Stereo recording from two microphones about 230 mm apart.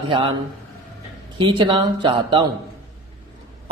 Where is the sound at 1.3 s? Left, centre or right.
Centre.